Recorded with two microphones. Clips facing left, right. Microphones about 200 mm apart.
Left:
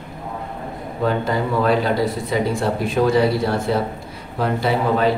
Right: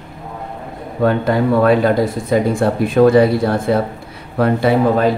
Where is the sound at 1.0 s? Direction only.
60° right (ahead or behind).